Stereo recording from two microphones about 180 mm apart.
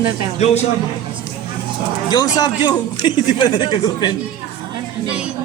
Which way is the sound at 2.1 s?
20° left (ahead or behind).